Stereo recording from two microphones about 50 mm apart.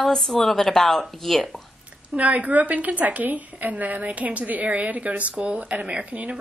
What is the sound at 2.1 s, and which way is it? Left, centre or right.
Speech, right.